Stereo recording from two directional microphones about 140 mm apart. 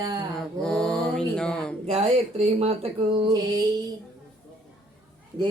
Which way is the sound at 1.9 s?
45° right (ahead or behind).